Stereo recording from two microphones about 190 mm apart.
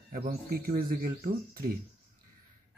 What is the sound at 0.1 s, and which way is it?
Speech, 50° right (ahead or behind).